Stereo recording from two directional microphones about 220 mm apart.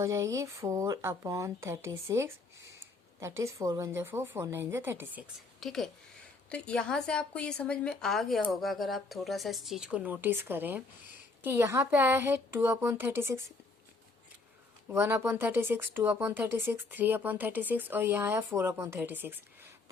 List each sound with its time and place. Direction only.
0.0 s speech: 15° right (ahead or behind)
5.5 s a woman's voice: centre (ahead or behind)
14.8 s speech: 10° right (ahead or behind)